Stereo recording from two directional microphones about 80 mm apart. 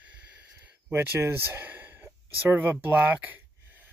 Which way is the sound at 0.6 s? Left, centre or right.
Right.